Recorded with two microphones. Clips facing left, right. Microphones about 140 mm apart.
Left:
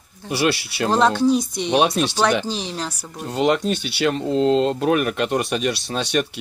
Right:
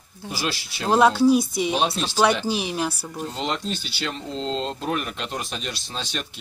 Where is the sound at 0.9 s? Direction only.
10° right (ahead or behind).